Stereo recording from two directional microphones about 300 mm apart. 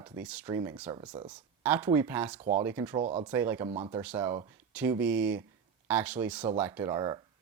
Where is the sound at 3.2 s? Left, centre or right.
Centre.